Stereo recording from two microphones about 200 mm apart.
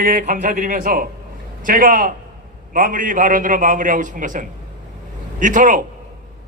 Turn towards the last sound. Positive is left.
turn(degrees=-40)  # may be behind; listen again after turning